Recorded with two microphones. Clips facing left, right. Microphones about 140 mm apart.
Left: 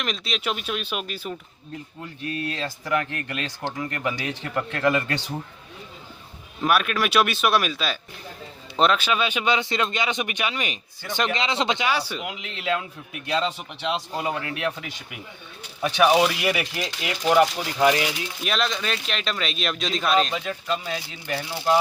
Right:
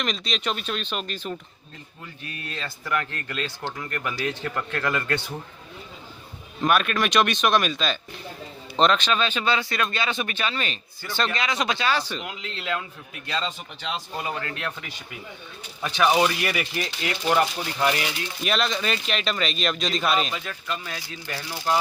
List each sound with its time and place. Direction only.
0.0 s speech: 5° left (ahead or behind)
2.2 s speech: 90° left
2.6 s speech: 15° left (ahead or behind)
6.6 s speech: 5° left (ahead or behind)
16.0 s speech: 10° left (ahead or behind)
18.4 s speech: centre (ahead or behind)
20.3 s speech: 20° left (ahead or behind)